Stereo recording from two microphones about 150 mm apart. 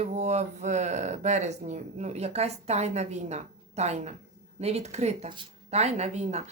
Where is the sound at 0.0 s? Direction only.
50° right (ahead or behind).